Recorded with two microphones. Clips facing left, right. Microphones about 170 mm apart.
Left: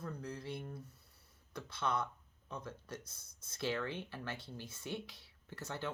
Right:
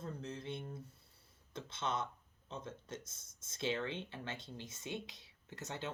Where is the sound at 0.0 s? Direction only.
25° right (ahead or behind).